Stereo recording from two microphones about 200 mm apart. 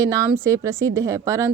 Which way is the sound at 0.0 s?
15° right (ahead or behind).